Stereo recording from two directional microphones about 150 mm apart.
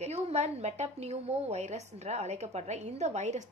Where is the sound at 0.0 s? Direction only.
45° right (ahead or behind).